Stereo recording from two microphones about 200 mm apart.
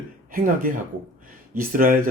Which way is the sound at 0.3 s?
45° right (ahead or behind).